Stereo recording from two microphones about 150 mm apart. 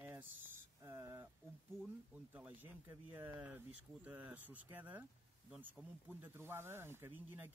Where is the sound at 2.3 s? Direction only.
10° right (ahead or behind).